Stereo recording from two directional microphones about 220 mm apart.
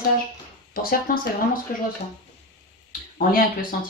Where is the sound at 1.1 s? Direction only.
40° left (ahead or behind).